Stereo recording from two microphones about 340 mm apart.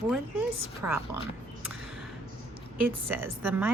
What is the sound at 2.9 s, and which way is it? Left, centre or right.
Speech, centre.